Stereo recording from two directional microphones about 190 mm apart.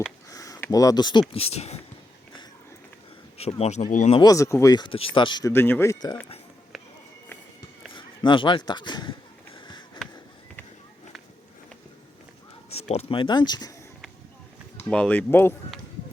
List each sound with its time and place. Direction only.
0.3 s a sound: 20° left (ahead or behind)
1.3 s speech: 30° left (ahead or behind)
3.3 s speech: 35° left (ahead or behind)
4.2 s speech: 15° left (ahead or behind)
6.7 s a sound: centre (ahead or behind)
7.9 s speech: 25° left (ahead or behind)
9.6 s sniff: 25° left (ahead or behind)
12.9 s speech: 30° left (ahead or behind)
14.8 s speech: 5° left (ahead or behind)